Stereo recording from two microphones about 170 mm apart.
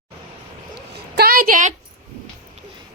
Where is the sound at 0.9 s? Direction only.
65° right (ahead or behind).